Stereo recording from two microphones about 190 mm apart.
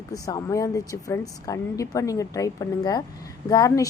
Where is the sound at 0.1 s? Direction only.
20° left (ahead or behind).